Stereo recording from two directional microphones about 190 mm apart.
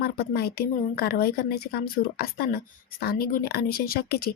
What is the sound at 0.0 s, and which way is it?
Speech, 55° left (ahead or behind).